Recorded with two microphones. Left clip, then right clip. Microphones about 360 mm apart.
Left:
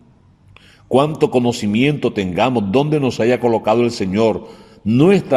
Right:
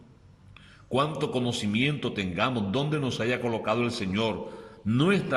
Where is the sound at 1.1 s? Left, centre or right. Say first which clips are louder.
Left 13 dB; centre.